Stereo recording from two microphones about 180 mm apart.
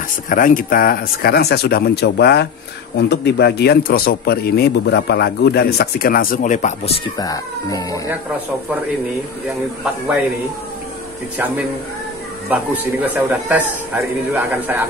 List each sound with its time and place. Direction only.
0.3 s a man's voice: 50° left (ahead or behind)
7.2 s speech: 20° left (ahead or behind)
11.3 s a man's voice: 10° right (ahead or behind)